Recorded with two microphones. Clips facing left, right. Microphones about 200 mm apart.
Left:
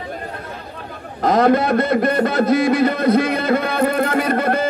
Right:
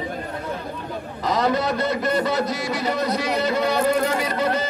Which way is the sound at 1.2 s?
55° left (ahead or behind).